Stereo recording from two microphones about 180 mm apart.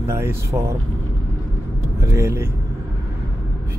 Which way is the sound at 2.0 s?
15° right (ahead or behind).